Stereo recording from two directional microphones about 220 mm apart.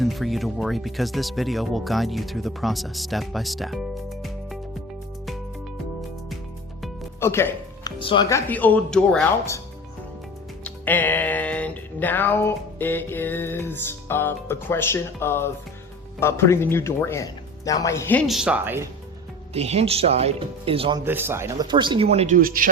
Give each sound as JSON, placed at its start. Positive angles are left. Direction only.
{"t": 0.0, "sound": "speech", "side_deg": 0}
{"t": 7.2, "sound": "music", "side_deg": 10}
{"t": 7.9, "sound": "music", "side_deg": 20}
{"t": 10.6, "sound": "music", "side_deg": 10}
{"t": 19.5, "sound": "speech", "side_deg": -30}
{"t": 21.0, "sound": "speech", "side_deg": -10}
{"t": 22.4, "sound": "a man's voice", "side_deg": -40}